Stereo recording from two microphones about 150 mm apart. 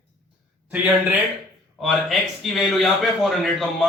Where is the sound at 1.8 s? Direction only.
Centre (ahead or behind).